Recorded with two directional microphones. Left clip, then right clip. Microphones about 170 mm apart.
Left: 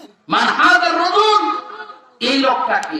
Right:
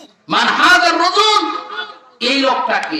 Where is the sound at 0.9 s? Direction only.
15° right (ahead or behind).